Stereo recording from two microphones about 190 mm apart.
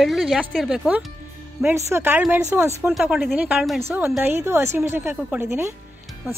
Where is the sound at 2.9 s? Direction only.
Centre (ahead or behind).